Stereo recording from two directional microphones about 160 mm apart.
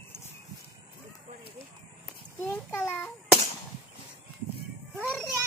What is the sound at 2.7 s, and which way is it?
Speech, 15° left (ahead or behind).